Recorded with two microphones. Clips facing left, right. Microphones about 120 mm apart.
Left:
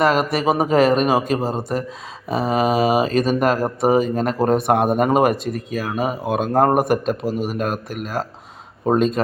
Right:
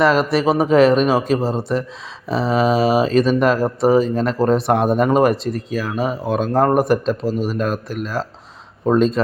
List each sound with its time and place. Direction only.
0.0 s a man's voice: 50° left (ahead or behind)